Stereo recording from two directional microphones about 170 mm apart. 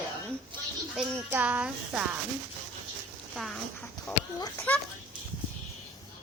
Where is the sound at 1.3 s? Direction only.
10° right (ahead or behind).